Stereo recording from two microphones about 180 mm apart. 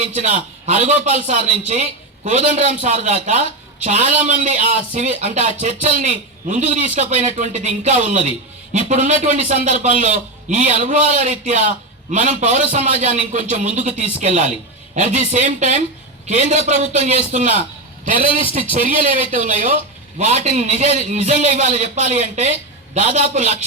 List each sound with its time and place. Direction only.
0.0 s speech: 40° right (ahead or behind)
18.9 s speech: 45° right (ahead or behind)